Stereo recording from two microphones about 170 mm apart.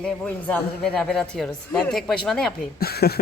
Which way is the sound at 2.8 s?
65° left (ahead or behind).